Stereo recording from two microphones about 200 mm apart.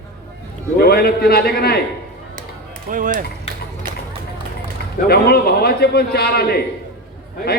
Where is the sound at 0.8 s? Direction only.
50° left (ahead or behind).